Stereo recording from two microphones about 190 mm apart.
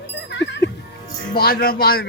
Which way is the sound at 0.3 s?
70° left (ahead or behind).